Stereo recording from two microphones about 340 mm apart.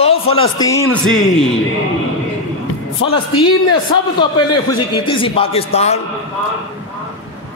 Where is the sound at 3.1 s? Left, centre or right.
Centre.